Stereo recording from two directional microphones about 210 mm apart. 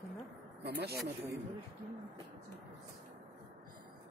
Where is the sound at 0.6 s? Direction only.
50° right (ahead or behind).